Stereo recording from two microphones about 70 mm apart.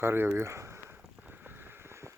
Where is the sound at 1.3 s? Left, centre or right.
Right.